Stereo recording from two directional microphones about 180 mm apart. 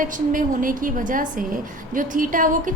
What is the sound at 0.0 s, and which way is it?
A woman's voice, 50° right (ahead or behind).